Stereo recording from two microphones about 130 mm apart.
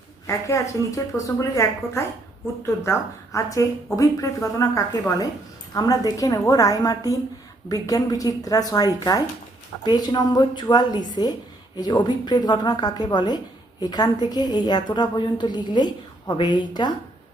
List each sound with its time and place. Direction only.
0.3 s a woman's voice: 25° left (ahead or behind)